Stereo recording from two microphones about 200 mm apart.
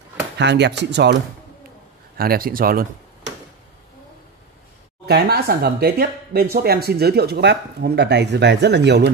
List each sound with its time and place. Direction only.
0.4 s speech: 60° right (ahead or behind)
2.1 s speech: 50° right (ahead or behind)
5.0 s speech: 55° right (ahead or behind)